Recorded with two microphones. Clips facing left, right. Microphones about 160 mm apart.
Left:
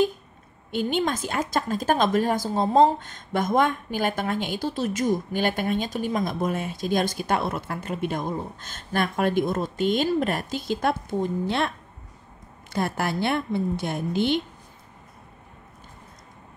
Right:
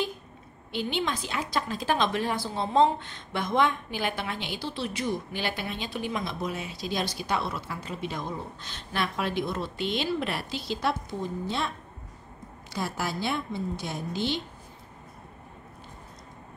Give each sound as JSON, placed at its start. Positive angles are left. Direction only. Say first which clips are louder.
{"t": 0.7, "sound": "a woman's voice", "louder": "left 5 dB", "side_deg": 45}
{"t": 11.4, "sound": "a woman's voice", "louder": "left 5 dB", "side_deg": 70}
{"t": 12.7, "sound": "a woman's voice", "louder": "left 5 dB", "side_deg": 55}